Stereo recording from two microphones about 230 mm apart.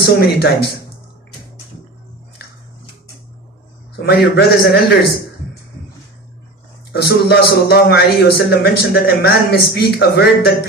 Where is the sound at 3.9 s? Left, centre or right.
Left.